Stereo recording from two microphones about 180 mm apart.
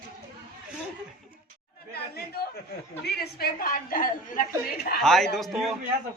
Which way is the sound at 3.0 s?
60° left (ahead or behind).